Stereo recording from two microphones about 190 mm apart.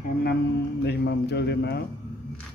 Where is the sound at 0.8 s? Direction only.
60° left (ahead or behind).